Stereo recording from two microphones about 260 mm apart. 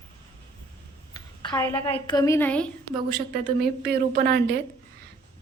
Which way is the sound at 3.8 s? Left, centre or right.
Right.